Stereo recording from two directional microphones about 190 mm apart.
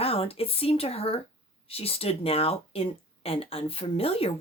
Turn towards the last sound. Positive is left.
turn(degrees=30)  # may be behind; listen again after turning